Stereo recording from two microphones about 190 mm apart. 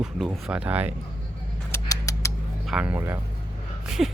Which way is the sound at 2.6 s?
5° right (ahead or behind).